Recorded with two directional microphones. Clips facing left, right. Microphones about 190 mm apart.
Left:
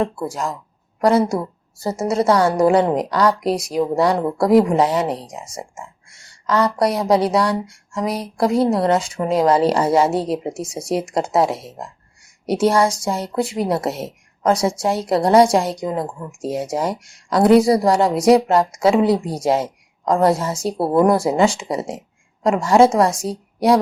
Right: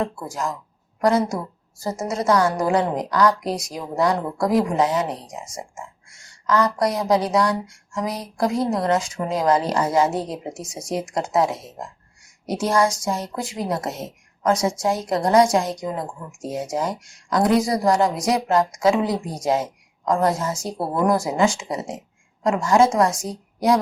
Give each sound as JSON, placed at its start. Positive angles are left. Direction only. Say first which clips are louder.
{"t": 0.0, "sound": "a woman's voice", "louder": "left 4 dB", "side_deg": 30}
{"t": 6.5, "sound": "speech", "louder": "left 2 dB", "side_deg": 30}
{"t": 8.7, "sound": "a woman's voice", "louder": "left 4 dB", "side_deg": 30}
{"t": 12.5, "sound": "a woman's voice", "louder": "left 4 dB", "side_deg": 30}